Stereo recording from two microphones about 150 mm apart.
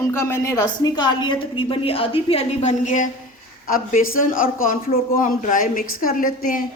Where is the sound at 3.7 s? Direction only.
65° left (ahead or behind).